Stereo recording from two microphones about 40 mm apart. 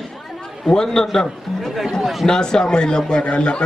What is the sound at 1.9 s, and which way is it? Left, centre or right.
Speech, centre.